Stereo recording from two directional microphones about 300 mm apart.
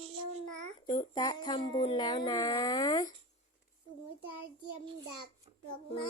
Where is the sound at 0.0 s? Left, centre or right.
Centre.